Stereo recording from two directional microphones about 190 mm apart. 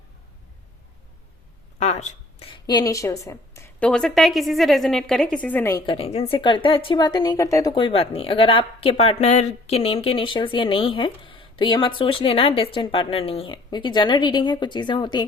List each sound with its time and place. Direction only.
1.8 s a woman's voice: 35° left (ahead or behind); by 5.8 s 10° left (ahead or behind)
5.8 s speech: 30° left (ahead or behind)